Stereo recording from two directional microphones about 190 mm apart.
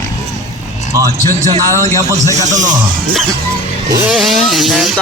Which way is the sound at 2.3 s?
40° right (ahead or behind).